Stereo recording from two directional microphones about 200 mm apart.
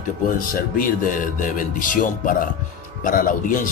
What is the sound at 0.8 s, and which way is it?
Speech, 40° left (ahead or behind).